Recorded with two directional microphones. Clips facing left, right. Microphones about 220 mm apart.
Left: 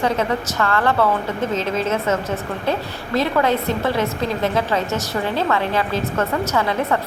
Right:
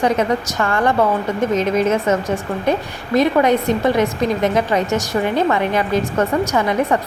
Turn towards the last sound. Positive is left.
turn(degrees=-15)  # may be behind; listen again after turning